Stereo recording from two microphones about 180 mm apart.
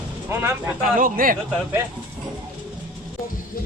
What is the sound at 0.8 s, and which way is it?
Speech, 50° right (ahead or behind).